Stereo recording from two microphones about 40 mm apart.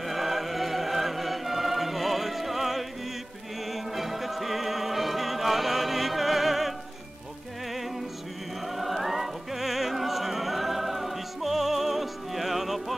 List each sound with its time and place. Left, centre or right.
0.0 s music: centre
8.6 s music: centre